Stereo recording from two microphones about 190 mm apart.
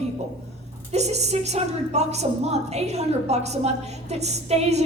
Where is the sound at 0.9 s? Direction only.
35° right (ahead or behind).